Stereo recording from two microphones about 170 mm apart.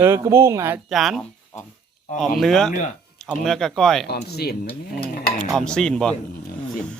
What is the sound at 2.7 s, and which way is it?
Speech, 45° left (ahead or behind).